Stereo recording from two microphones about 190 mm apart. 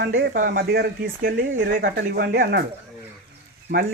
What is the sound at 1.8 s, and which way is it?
Speech, 55° right (ahead or behind).